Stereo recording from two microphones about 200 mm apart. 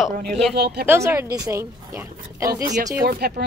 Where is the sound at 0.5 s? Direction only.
55° right (ahead or behind).